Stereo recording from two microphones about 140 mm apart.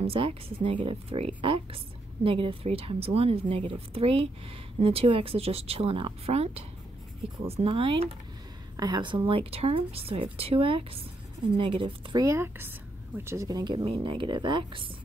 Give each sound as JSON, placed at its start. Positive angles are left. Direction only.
{"t": 0.0, "sound": "speech", "side_deg": -40}
{"t": 8.7, "sound": "speech", "side_deg": -30}
{"t": 12.2, "sound": "speech", "side_deg": -20}
{"t": 13.8, "sound": "speech", "side_deg": -35}